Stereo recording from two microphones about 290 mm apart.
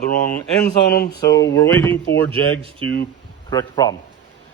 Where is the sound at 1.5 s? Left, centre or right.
Centre.